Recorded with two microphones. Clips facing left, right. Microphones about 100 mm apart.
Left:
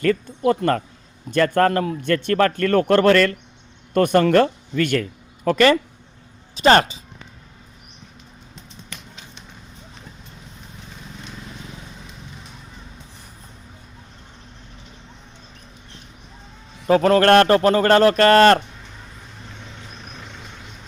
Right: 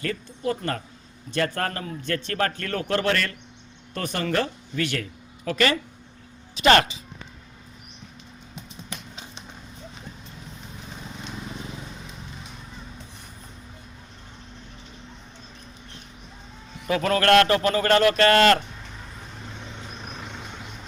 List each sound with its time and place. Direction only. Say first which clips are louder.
0.0 s speech: left 9 dB; 50° left (ahead or behind)
5.5 s a man's voice: left 8 dB; 40° left (ahead or behind)
8.9 s a sound: right 1 dB; 20° right (ahead or behind)
16.8 s a man's voice: left 7 dB; 40° left (ahead or behind)
20.1 s vehicle: right 2 dB; 5° right (ahead or behind)